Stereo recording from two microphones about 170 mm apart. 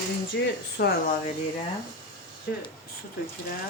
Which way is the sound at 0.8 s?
70° left (ahead or behind).